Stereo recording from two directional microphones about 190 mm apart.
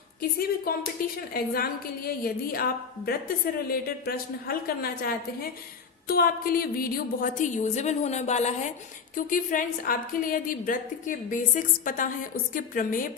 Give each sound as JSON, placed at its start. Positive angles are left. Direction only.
{"t": 0.2, "sound": "a woman's voice", "side_deg": 50}